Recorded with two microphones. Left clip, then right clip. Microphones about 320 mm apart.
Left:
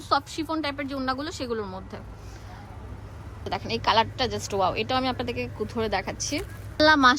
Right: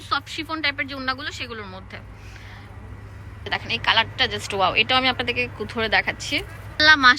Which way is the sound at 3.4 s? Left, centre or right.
Centre.